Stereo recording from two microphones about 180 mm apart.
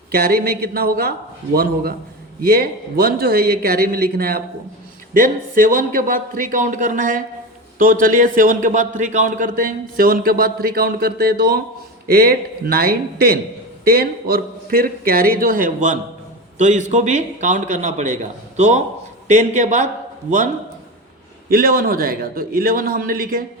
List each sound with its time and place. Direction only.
0.1 s speech: 60° right (ahead or behind)
2.4 s a man's voice: 60° right (ahead or behind)
21.5 s speech: 55° right (ahead or behind)